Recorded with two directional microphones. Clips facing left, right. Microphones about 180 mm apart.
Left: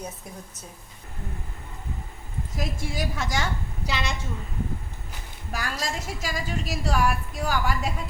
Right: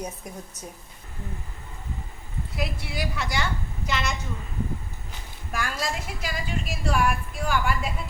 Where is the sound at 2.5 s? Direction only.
45° left (ahead or behind).